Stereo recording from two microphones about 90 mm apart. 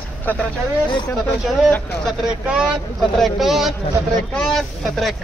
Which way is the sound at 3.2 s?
Centre (ahead or behind).